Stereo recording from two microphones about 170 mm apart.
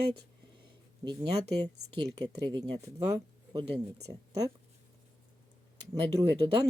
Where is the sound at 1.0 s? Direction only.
25° right (ahead or behind).